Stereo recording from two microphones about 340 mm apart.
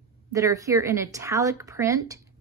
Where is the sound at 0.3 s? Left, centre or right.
Centre.